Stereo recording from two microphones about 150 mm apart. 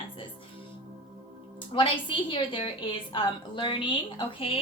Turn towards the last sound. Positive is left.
turn(degrees=35)  # may be behind; listen again after turning